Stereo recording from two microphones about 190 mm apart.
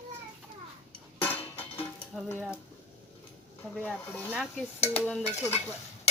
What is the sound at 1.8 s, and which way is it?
Cutlery, 10° left (ahead or behind).